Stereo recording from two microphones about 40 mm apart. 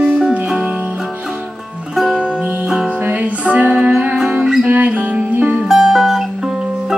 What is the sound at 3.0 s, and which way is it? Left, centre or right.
Music, right.